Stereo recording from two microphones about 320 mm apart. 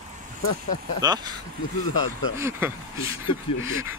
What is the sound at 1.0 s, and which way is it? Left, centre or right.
Speech, centre.